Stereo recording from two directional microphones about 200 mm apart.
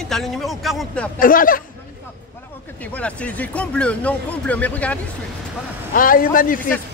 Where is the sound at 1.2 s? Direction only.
45° left (ahead or behind).